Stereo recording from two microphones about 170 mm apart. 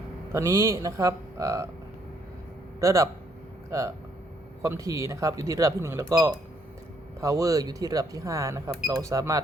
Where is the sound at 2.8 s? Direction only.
20° right (ahead or behind).